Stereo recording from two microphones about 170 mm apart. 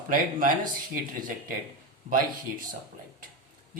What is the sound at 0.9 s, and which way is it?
Speech, 55° right (ahead or behind).